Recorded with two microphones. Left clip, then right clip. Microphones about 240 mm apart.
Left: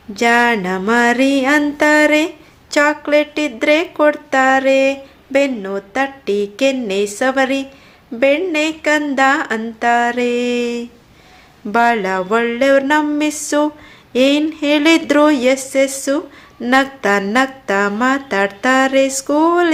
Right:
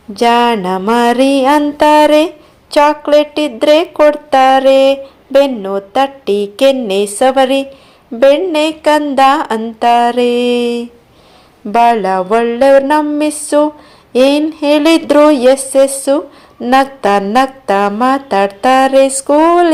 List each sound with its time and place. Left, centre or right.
0.2 s music: centre
11.7 s a woman's voice: centre